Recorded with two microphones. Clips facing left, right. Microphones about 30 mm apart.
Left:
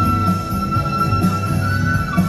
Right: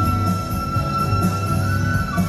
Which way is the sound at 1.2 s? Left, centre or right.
Left.